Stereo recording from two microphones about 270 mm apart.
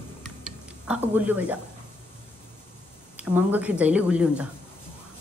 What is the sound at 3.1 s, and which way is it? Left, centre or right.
A woman's voice, centre.